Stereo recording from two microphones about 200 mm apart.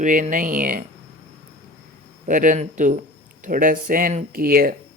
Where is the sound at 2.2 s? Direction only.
40° right (ahead or behind).